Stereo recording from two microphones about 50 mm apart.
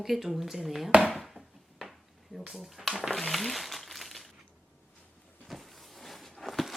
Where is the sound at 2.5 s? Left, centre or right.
Centre.